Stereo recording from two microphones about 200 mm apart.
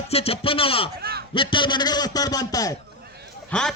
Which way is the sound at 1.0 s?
50° right (ahead or behind).